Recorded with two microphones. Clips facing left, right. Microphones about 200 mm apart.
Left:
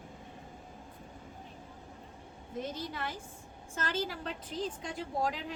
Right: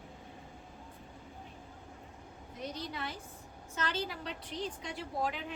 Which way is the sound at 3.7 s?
45° left (ahead or behind).